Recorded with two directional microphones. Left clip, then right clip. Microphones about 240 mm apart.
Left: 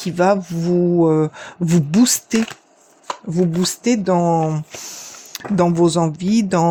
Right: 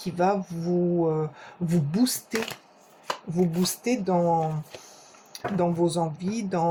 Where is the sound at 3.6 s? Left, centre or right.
Left.